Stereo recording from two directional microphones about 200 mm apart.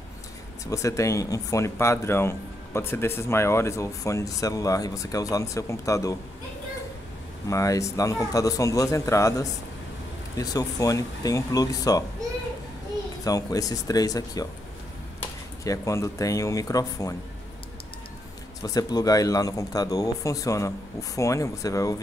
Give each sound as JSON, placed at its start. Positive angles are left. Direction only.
{"t": 0.7, "sound": "speech", "side_deg": 15}
{"t": 7.4, "sound": "speech", "side_deg": 15}
{"t": 13.2, "sound": "speech", "side_deg": 20}
{"t": 15.6, "sound": "speech", "side_deg": 15}
{"t": 18.6, "sound": "speech", "side_deg": 20}